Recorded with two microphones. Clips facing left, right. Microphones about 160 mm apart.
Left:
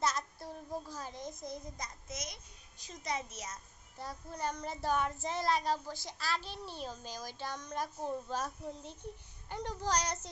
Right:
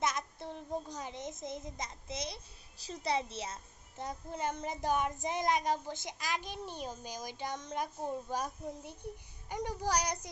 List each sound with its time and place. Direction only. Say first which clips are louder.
0.0 s a child's voice: even; 20° right (ahead or behind)
4.0 s child singing: right 2 dB; 20° right (ahead or behind)